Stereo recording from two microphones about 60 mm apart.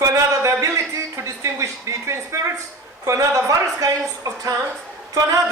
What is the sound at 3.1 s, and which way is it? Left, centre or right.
A woman's voice, right.